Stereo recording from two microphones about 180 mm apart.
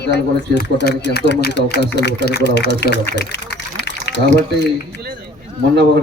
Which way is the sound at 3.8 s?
70° left (ahead or behind).